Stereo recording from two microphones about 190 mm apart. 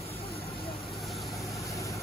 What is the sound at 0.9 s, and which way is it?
Vehicle, centre (ahead or behind).